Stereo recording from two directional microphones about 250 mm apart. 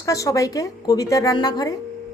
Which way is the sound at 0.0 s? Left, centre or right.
Centre.